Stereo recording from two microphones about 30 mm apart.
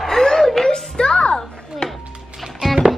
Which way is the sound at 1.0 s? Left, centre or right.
Left.